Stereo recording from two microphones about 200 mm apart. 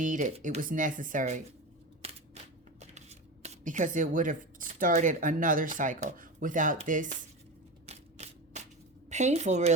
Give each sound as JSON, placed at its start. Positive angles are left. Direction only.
{"t": 0.0, "sound": "speech", "side_deg": -40}
{"t": 2.9, "sound": "speech", "side_deg": -35}
{"t": 7.9, "sound": "shuffling cards", "side_deg": -30}
{"t": 9.0, "sound": "a woman's voice", "side_deg": -35}